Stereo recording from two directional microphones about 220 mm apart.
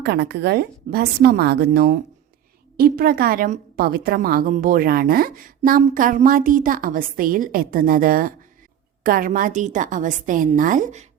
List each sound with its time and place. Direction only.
0.0 s a woman's voice: 50° right (ahead or behind); by 11.0 s 35° right (ahead or behind)